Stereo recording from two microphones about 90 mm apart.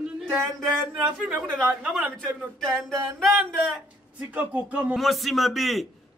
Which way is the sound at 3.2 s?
Centre (ahead or behind).